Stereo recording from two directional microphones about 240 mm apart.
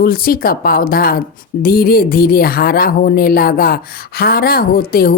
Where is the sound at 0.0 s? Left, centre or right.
Left.